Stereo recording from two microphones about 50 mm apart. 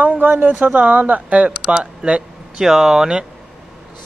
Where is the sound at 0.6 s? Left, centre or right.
Right.